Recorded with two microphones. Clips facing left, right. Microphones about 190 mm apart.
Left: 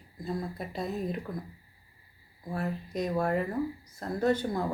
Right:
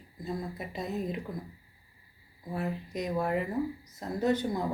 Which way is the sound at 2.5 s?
20° right (ahead or behind).